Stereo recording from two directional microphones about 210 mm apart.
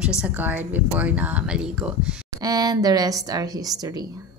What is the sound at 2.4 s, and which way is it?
Speech, 20° right (ahead or behind).